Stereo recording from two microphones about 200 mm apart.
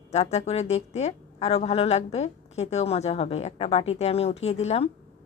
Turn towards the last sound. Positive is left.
turn(degrees=30)  # may be behind; listen again after turning